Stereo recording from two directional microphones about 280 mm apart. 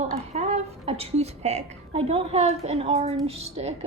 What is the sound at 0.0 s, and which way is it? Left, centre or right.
A woman's voice, right.